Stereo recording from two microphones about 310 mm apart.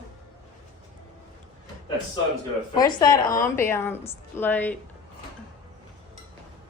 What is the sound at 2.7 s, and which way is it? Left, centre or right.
A woman's voice, centre.